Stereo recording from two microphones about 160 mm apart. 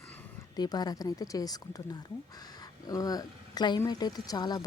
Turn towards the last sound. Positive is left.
turn(degrees=25)  # may be behind; listen again after turning